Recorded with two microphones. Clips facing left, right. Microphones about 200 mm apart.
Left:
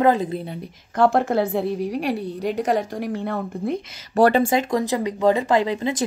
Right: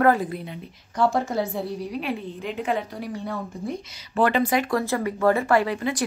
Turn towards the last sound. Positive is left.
turn(degrees=20)  # may be behind; listen again after turning